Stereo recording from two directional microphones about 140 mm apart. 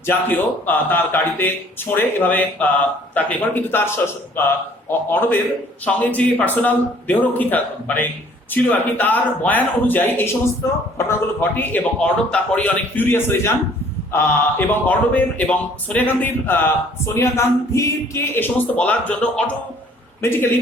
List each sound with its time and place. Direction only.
0.0 s speech: 15° left (ahead or behind)